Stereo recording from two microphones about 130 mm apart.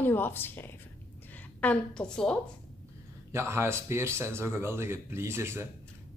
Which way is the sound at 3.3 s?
20° right (ahead or behind).